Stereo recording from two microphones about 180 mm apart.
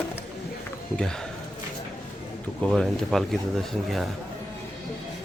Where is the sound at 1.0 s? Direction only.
5° left (ahead or behind).